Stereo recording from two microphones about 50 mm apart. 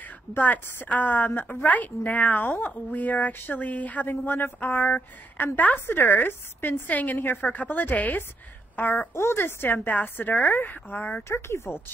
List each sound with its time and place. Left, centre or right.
0.8 s a woman's voice: left
2.4 s a woman's voice: left
2.7 s a woman's voice: left
4.1 s a woman's voice: left
5.9 s a woman's voice: left
9.1 s speech: left
9.8 s a woman's voice: left
11.2 s speech: left